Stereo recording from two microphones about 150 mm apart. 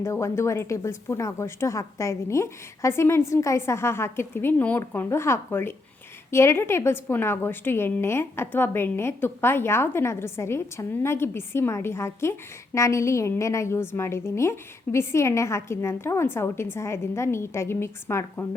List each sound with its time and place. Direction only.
0.0 s a woman's voice: 20° left (ahead or behind)